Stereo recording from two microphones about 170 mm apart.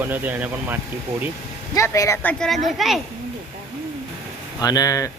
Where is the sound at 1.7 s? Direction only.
20° left (ahead or behind); by 3.0 s centre (ahead or behind).